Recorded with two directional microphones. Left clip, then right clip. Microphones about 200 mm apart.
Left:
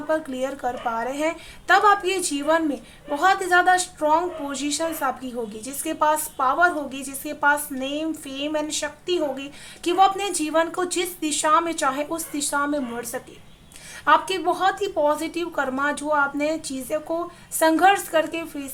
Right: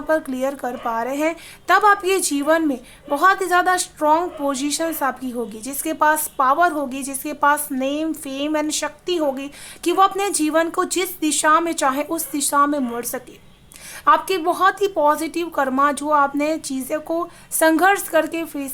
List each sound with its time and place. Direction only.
0.1 s a woman's voice: 35° right (ahead or behind)